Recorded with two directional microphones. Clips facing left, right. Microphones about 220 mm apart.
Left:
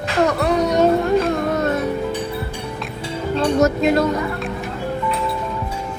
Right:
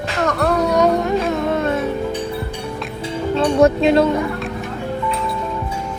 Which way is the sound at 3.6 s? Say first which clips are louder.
Right 4 dB; 30° right (ahead or behind).